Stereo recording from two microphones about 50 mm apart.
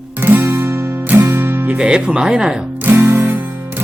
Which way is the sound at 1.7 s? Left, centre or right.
Centre.